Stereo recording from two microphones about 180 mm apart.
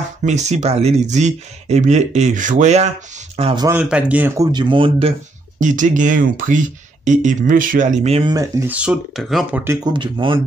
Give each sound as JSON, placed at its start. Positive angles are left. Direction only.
{"t": 0.2, "sound": "speech", "side_deg": -40}
{"t": 3.6, "sound": "speech", "side_deg": -10}
{"t": 4.4, "sound": "speech", "side_deg": -25}
{"t": 5.6, "sound": "speech", "side_deg": -45}
{"t": 8.3, "sound": "speech", "side_deg": -20}
{"t": 8.7, "sound": "speech", "side_deg": 0}
{"t": 9.9, "sound": "speech", "side_deg": -25}